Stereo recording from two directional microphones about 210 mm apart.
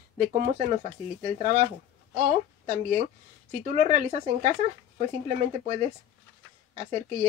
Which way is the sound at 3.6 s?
30° right (ahead or behind).